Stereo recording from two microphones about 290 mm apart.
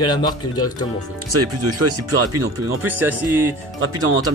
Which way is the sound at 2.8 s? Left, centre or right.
Centre.